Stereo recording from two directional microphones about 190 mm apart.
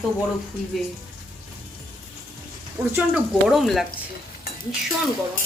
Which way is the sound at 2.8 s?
5° right (ahead or behind).